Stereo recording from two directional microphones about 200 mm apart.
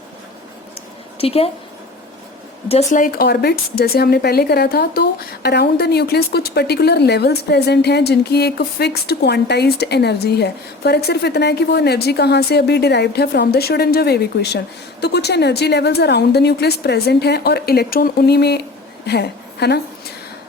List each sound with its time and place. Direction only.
1.2 s a woman's voice: 30° left (ahead or behind)
2.6 s speech: 30° left (ahead or behind)
3.0 s a woman's voice: 50° left (ahead or behind)